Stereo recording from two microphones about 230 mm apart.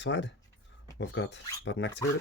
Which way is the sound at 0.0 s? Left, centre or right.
Left.